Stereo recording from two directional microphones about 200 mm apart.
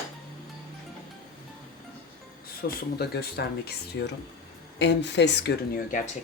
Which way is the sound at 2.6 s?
50° left (ahead or behind).